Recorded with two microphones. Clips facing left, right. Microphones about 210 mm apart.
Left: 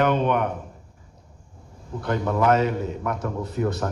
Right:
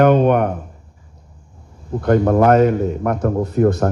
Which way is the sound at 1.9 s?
50° right (ahead or behind).